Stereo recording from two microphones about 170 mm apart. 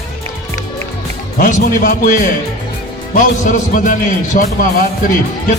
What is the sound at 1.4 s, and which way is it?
Speech, 50° left (ahead or behind).